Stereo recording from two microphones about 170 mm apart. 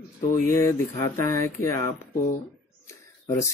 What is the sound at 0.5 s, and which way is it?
Speech, 15° left (ahead or behind).